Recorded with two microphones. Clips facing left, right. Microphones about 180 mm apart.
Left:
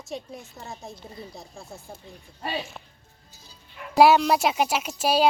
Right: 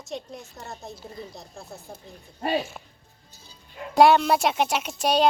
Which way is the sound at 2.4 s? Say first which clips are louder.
Right 6 dB; 45° right (ahead or behind).